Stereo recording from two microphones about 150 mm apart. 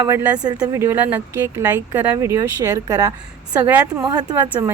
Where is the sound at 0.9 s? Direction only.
10° right (ahead or behind).